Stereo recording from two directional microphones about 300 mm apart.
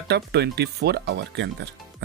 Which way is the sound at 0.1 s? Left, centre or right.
Right.